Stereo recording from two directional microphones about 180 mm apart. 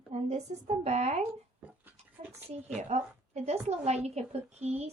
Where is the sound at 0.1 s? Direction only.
40° right (ahead or behind).